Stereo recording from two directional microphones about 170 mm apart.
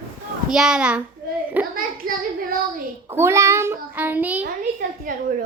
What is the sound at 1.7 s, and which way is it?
Speech, 55° right (ahead or behind).